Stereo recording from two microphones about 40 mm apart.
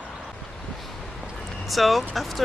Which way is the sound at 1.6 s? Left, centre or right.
Centre.